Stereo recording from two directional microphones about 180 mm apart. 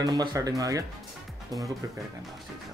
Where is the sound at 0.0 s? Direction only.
20° right (ahead or behind).